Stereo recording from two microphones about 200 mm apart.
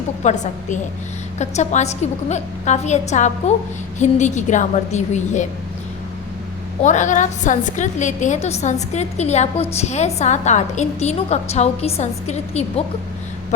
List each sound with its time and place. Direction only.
0.2 s a woman's voice: 35° left (ahead or behind)
6.8 s a woman's voice: 40° left (ahead or behind)